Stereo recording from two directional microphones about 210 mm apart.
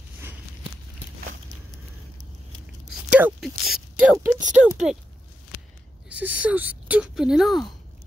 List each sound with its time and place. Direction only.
3.1 s speech: 10° right (ahead or behind)
4.4 s speech: 35° right (ahead or behind)
6.0 s speech: 5° right (ahead or behind)